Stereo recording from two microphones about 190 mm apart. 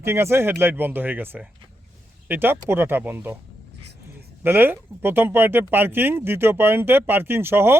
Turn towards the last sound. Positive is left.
turn(degrees=-10)  # may be behind; listen again after turning